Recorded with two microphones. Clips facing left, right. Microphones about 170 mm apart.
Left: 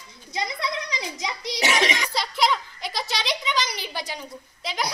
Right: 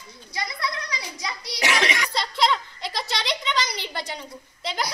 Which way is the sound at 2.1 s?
Centre (ahead or behind).